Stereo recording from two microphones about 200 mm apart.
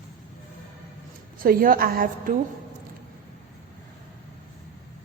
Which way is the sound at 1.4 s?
45° right (ahead or behind).